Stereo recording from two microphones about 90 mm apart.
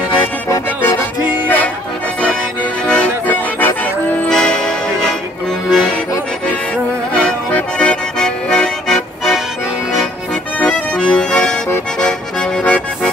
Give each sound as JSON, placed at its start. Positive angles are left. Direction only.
{"t": 1.2, "sound": "music", "side_deg": -15}
{"t": 2.9, "sound": "accordion", "side_deg": 15}
{"t": 4.3, "sound": "music", "side_deg": 10}
{"t": 5.7, "sound": "accordion", "side_deg": 0}
{"t": 7.2, "sound": "accordion", "side_deg": 10}
{"t": 10.6, "sound": "accordion", "side_deg": 10}